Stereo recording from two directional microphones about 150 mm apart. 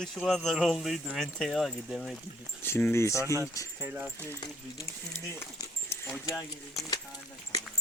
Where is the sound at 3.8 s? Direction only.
10° right (ahead or behind).